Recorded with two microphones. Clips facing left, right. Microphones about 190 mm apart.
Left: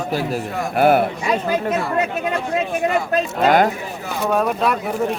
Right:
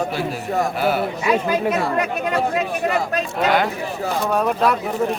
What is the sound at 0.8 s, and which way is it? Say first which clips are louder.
Speech: left 10 dB; 55° left (ahead or behind).